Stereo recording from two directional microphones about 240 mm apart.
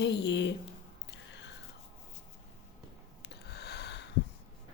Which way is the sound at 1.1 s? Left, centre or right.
Left.